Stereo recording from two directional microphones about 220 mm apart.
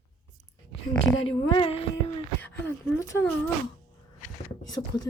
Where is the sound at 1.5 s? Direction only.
25° left (ahead or behind).